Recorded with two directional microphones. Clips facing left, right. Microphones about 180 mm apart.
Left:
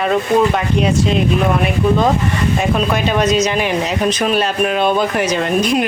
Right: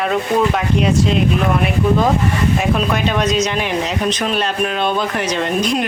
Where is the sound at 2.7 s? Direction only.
Centre (ahead or behind).